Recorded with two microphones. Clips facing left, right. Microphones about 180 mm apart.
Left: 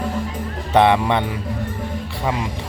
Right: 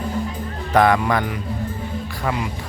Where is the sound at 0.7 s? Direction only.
25° left (ahead or behind).